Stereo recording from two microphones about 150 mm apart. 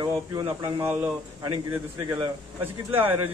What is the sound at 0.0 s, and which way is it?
Speech, 25° right (ahead or behind).